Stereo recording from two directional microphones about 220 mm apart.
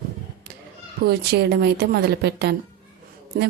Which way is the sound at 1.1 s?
50° right (ahead or behind).